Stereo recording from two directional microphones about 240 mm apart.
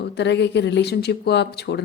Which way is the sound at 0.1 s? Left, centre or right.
Left.